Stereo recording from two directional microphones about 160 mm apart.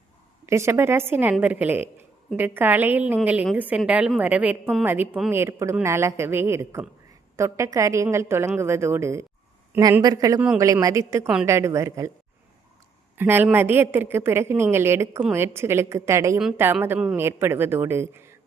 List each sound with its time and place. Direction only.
0.4 s a woman's voice: 15° right (ahead or behind)
13.1 s a woman's voice: 15° right (ahead or behind)